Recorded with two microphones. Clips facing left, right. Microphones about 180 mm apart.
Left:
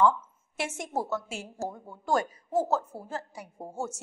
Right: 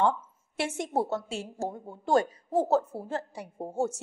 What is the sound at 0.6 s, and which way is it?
A woman's voice, 35° right (ahead or behind).